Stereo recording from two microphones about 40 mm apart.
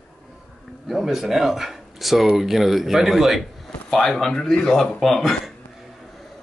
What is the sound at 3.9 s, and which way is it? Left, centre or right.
A man's voice, centre.